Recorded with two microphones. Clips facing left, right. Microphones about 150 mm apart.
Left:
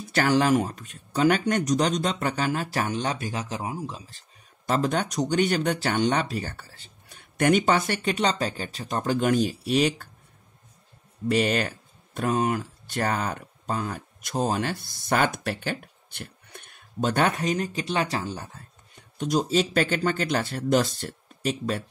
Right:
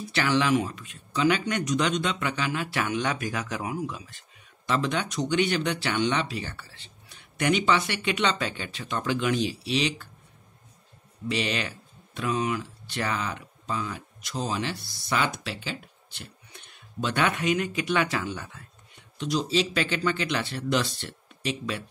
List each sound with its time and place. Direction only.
0.1 s speech: 45° left (ahead or behind)
11.2 s speech: 50° left (ahead or behind)